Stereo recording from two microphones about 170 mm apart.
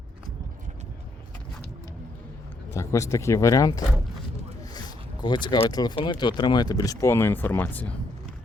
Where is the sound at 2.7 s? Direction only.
15° left (ahead or behind).